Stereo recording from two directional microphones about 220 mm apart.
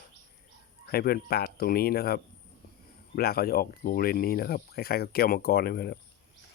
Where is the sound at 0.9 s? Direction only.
45° left (ahead or behind).